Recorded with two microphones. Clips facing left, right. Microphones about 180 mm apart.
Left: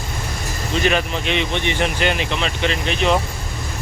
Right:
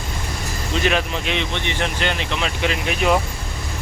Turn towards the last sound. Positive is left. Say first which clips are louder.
# even
turn(degrees=-5)  # may be behind; listen again after turning